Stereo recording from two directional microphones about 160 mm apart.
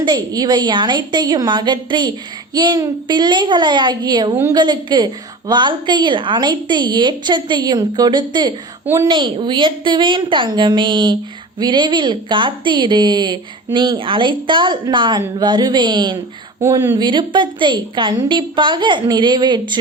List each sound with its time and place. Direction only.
0.0 s a woman's voice: 25° right (ahead or behind)